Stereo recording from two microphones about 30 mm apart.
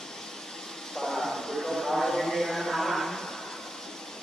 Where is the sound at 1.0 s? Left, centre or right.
Centre.